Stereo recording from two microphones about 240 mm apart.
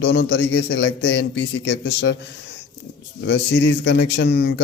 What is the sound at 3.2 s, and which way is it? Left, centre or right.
A man's voice, left.